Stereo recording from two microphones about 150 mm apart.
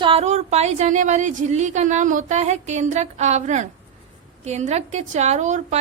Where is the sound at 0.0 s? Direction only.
40° right (ahead or behind).